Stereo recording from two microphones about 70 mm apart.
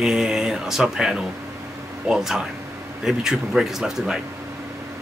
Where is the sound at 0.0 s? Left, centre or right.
Centre.